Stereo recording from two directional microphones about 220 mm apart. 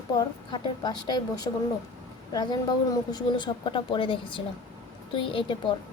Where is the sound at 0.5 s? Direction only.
20° left (ahead or behind).